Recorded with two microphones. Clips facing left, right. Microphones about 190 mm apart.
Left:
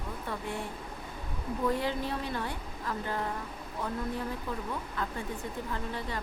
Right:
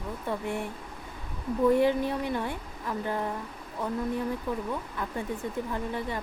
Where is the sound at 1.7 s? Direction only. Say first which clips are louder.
Right 8 dB; 20° right (ahead or behind).